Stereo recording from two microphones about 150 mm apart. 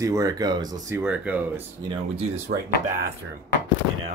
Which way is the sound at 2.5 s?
90° right.